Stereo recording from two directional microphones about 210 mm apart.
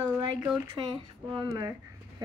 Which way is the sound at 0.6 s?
15° right (ahead or behind).